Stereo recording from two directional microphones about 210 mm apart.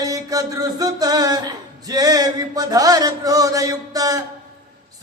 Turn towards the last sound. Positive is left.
turn(degrees=-15)  # may be behind; listen again after turning